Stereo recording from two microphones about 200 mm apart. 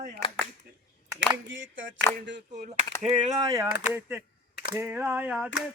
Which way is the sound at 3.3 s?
15° right (ahead or behind).